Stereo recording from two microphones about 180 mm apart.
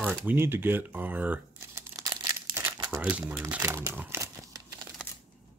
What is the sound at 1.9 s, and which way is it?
Crumpling, 20° right (ahead or behind).